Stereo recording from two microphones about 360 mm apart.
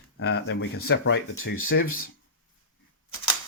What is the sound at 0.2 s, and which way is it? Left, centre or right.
Speech, left.